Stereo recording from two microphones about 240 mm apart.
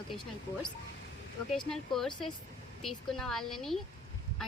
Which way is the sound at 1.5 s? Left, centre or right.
Centre.